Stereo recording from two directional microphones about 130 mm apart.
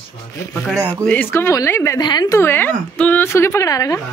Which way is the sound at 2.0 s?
30° left (ahead or behind).